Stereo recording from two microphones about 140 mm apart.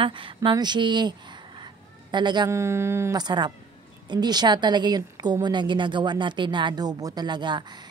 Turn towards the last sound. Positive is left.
turn(degrees=-30)  # may be behind; listen again after turning